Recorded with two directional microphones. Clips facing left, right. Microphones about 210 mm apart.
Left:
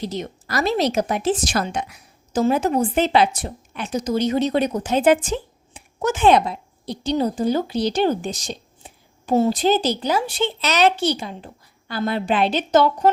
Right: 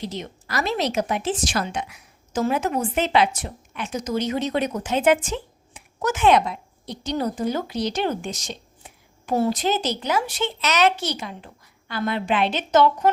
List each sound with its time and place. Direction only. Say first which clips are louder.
0.0 s a woman's voice: left 4 dB; 40° left (ahead or behind)